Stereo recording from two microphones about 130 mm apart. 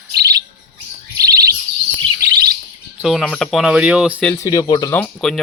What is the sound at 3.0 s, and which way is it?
Speech, centre (ahead or behind).